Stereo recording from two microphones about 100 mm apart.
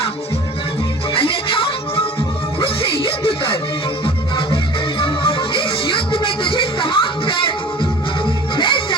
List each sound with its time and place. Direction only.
1.1 s music: 65° left (ahead or behind)